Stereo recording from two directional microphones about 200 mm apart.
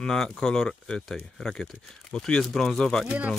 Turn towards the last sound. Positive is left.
turn(degrees=5)  # may be behind; listen again after turning